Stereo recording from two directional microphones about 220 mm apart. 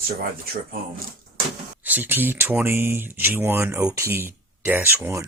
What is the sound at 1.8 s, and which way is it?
Speech, 10° right (ahead or behind).